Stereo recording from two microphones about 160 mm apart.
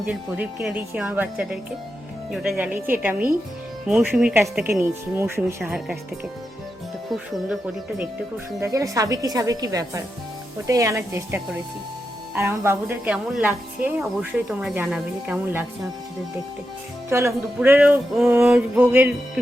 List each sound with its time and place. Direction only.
0.1 s a woman's voice: 5° right (ahead or behind)
5.7 s speech: 5° right (ahead or behind)
8.6 s a woman's voice: 20° right (ahead or behind); by 15.4 s 5° right (ahead or behind)
17.1 s a woman's voice: 15° right (ahead or behind)